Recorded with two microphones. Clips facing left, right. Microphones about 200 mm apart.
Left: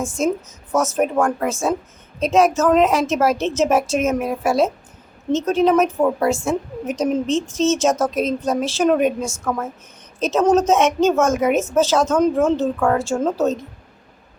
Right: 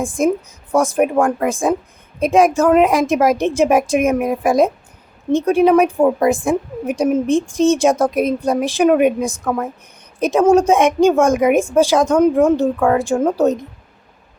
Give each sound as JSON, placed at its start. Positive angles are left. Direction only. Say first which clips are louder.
{"t": 0.0, "sound": "a woman's voice", "louder": "right 4 dB", "side_deg": -15}